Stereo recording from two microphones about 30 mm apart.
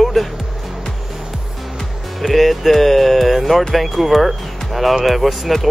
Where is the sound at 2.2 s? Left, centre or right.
Centre.